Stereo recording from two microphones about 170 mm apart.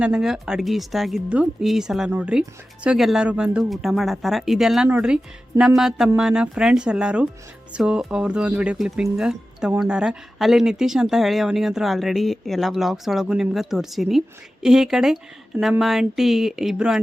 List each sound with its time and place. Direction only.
0.0 s speech: 5° right (ahead or behind)